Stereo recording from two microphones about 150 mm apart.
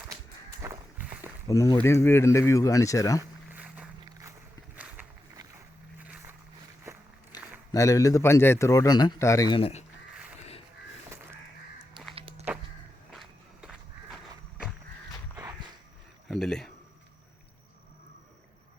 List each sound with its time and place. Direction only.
0.6 s walk: 20° right (ahead or behind)
1.5 s a man's voice: 20° left (ahead or behind)
3.2 s a sound: 10° right (ahead or behind)
7.3 s a sound: 25° left (ahead or behind)
7.7 s a man's voice: 20° left (ahead or behind)
9.6 s speech: 40° left (ahead or behind)
11.9 s walk: 40° right (ahead or behind)
13.1 s walk: centre (ahead or behind)
16.3 s a sound: 5° left (ahead or behind)